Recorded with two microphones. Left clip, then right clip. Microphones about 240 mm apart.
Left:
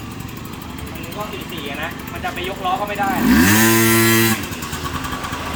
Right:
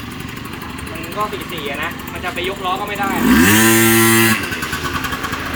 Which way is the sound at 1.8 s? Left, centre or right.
Centre.